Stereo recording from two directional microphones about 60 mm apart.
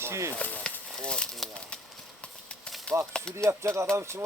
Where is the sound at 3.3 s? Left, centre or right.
Right.